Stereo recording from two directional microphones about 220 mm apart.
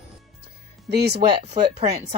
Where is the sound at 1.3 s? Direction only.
20° right (ahead or behind).